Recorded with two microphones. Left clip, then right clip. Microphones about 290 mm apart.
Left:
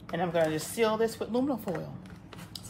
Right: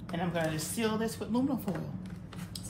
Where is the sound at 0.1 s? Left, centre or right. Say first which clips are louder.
Left 6 dB; left.